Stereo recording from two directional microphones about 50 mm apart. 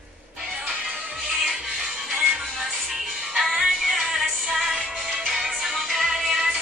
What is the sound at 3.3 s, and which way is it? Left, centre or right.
Music, centre.